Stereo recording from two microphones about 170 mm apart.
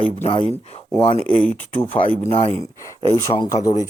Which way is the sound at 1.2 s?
5° left (ahead or behind).